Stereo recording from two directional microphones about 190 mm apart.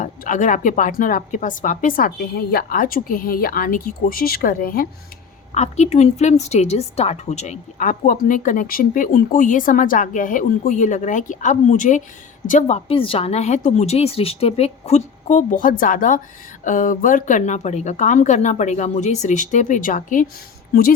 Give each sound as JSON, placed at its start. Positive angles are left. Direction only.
{"t": 0.0, "sound": "a woman's voice", "side_deg": 45}
{"t": 5.5, "sound": "a woman's voice", "side_deg": 35}